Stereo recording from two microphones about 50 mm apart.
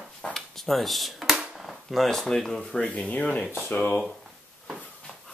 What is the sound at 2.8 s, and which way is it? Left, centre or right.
Speech, left.